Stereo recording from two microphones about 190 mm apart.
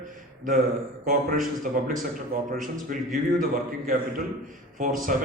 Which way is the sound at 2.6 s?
45° right (ahead or behind).